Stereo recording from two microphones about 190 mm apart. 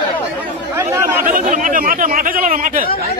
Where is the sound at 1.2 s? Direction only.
45° right (ahead or behind).